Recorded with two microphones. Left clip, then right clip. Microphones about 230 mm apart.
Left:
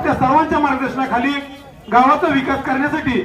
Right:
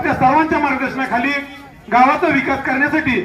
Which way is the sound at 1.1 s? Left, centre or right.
Right.